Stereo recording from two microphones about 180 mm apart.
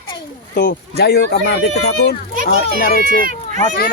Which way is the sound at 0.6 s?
60° left (ahead or behind).